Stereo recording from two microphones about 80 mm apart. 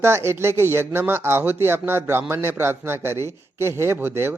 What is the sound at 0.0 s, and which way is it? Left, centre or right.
Speech, right.